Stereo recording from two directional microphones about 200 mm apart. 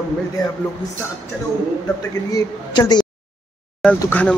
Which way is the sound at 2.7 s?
20° left (ahead or behind).